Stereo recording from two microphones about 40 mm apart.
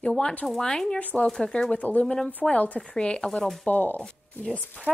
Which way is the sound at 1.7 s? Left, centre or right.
Left.